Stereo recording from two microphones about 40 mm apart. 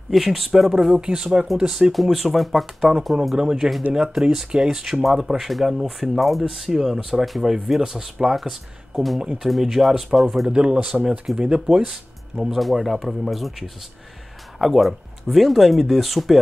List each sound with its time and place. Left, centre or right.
0.1 s speech: centre
1.7 s speech: centre
3.3 s speech: centre
10.5 s speech: right
11.9 s speech: centre